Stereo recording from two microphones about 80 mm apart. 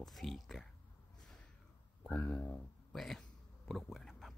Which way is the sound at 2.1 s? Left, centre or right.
Left.